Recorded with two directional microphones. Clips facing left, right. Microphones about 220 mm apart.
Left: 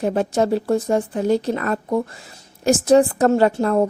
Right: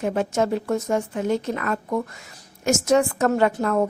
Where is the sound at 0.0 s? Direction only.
35° left (ahead or behind).